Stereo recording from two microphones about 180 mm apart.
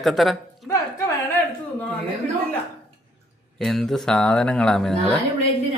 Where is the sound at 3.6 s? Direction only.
Centre (ahead or behind).